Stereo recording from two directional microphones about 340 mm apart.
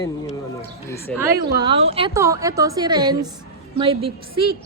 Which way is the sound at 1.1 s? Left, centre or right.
Centre.